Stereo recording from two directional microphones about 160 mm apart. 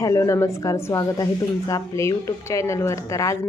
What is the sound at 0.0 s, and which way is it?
A woman's voice, 20° left (ahead or behind).